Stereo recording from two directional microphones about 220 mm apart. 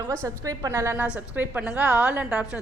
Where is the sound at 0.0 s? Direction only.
10° right (ahead or behind).